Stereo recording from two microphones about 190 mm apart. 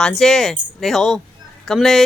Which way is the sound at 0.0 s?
Centre (ahead or behind).